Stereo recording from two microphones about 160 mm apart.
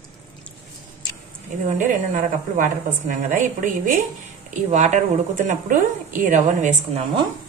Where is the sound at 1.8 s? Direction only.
55° right (ahead or behind).